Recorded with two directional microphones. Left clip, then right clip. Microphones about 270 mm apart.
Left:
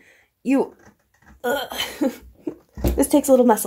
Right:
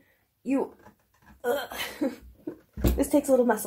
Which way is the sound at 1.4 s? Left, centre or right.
Left.